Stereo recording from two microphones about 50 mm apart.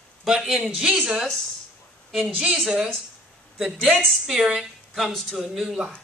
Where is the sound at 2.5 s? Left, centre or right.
Centre.